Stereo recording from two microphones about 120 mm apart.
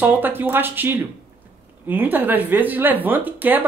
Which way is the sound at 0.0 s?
15° right (ahead or behind).